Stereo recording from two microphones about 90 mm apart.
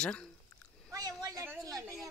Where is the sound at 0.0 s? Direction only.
10° left (ahead or behind).